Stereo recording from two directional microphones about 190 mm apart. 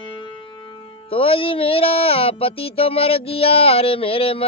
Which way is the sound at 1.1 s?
30° left (ahead or behind).